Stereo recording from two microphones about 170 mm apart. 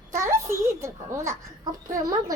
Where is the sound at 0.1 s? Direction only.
15° right (ahead or behind).